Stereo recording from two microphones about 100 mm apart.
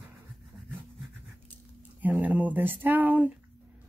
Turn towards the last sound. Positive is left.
turn(degrees=-15)  # may be behind; listen again after turning